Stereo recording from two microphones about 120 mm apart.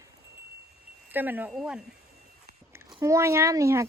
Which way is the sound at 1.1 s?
15° right (ahead or behind).